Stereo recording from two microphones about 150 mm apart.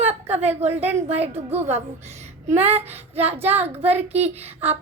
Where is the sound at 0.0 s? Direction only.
45° right (ahead or behind).